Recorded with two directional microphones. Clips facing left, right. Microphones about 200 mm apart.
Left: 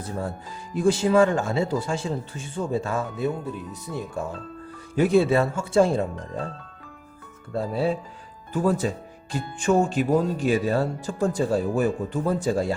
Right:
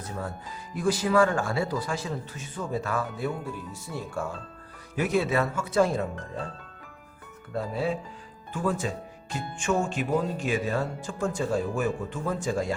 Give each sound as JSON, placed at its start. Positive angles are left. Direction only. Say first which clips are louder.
{"t": 0.0, "sound": "speech", "louder": "left 4 dB", "side_deg": 30}
{"t": 4.9, "sound": "speech", "louder": "left 6 dB", "side_deg": 30}
{"t": 7.5, "sound": "speech", "louder": "left 4 dB", "side_deg": 30}